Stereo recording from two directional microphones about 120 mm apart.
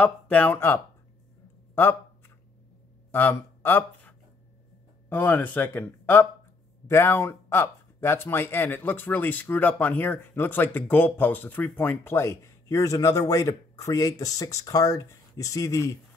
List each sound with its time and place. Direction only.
0.0 s speech: 15° left (ahead or behind)
1.8 s a sound: 20° left (ahead or behind)
3.1 s speech: 15° left (ahead or behind)
5.1 s speech: 15° left (ahead or behind)